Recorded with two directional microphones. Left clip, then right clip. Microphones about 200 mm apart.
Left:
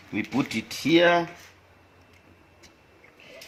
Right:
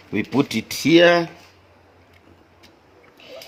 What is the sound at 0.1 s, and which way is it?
Speech, 45° right (ahead or behind).